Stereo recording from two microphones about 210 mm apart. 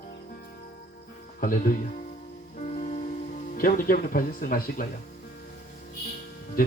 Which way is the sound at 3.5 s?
40° left (ahead or behind).